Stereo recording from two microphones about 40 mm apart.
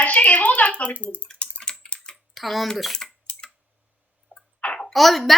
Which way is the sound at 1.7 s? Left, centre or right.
Centre.